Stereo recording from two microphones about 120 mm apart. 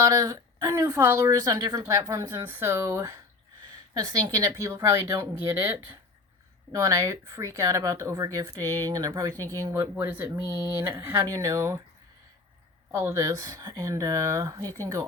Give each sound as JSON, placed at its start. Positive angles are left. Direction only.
{"t": 0.0, "sound": "speech", "side_deg": -30}
{"t": 6.7, "sound": "speech", "side_deg": -30}
{"t": 12.9, "sound": "speech", "side_deg": -25}